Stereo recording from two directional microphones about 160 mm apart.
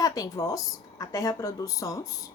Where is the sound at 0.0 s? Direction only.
20° left (ahead or behind).